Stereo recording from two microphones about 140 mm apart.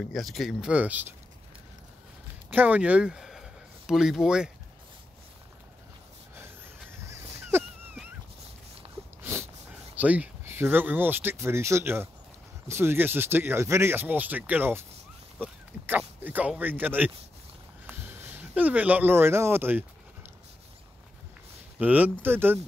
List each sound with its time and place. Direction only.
0.1 s speech: centre (ahead or behind)
2.5 s speech: 10° right (ahead or behind)
7.1 s dog: 15° right (ahead or behind)
9.2 s a sound: 15° right (ahead or behind)
9.9 s speech: 10° right (ahead or behind)
21.7 s speech: 10° right (ahead or behind)